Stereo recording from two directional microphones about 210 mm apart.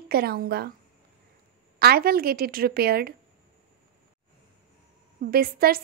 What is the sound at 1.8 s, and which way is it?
Speech, 45° right (ahead or behind).